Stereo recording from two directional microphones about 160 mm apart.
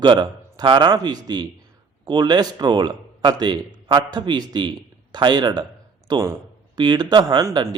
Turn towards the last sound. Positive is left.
turn(degrees=-25)  # may be behind; listen again after turning